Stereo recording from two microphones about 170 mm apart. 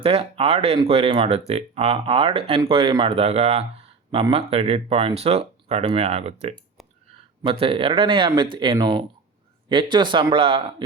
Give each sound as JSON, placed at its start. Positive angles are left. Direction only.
{"t": 0.0, "sound": "speech", "side_deg": -35}